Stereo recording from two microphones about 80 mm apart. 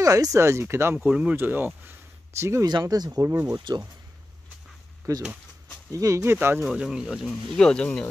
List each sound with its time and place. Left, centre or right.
0.0 s speech: right
0.9 s speech: centre
1.9 s a sound: right
2.8 s speech: right
3.7 s speech: right
5.1 s speech: right
6.2 s speech: right
6.7 s speech: centre
7.5 s speech: centre